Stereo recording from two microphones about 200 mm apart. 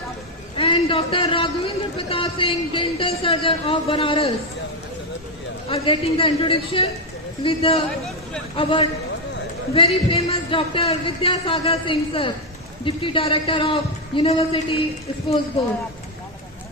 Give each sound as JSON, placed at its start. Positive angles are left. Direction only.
{"t": 0.5, "sound": "a man's voice", "side_deg": 25}
{"t": 5.6, "sound": "a man's voice", "side_deg": 25}